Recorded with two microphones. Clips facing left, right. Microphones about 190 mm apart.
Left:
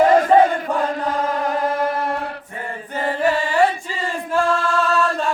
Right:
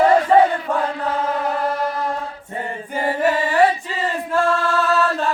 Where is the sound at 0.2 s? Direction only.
45° left (ahead or behind).